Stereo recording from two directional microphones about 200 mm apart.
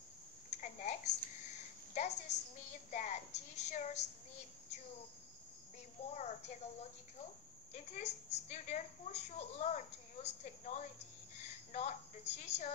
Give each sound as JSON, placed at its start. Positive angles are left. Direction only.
{"t": 0.5, "sound": "a sound", "side_deg": 35}
{"t": 2.0, "sound": "a woman's voice", "side_deg": 35}
{"t": 6.0, "sound": "a woman's voice", "side_deg": 35}